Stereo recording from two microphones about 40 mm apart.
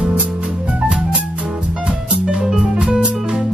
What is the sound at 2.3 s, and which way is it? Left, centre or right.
Music, centre.